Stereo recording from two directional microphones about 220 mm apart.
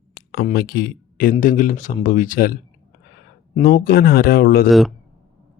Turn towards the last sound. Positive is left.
turn(degrees=0)  # may be behind; listen again after turning